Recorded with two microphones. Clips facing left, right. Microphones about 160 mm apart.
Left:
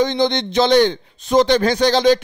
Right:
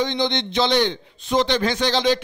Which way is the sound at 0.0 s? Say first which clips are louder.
Left 5 dB; 45° left (ahead or behind).